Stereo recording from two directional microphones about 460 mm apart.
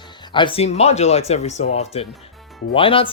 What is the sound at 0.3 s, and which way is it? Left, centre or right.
Speech, centre.